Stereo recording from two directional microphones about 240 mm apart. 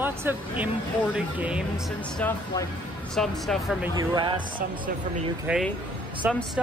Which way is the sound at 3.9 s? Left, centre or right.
Centre.